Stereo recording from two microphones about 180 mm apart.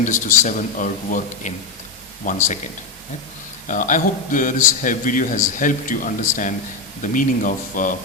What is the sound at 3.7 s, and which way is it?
A man's voice, 45° left (ahead or behind).